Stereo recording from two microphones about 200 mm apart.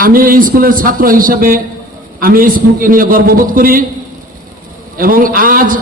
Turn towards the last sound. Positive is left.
turn(degrees=-45)  # may be behind; listen again after turning